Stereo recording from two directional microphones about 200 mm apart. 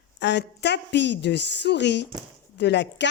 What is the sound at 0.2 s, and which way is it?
A woman's voice, 60° left (ahead or behind).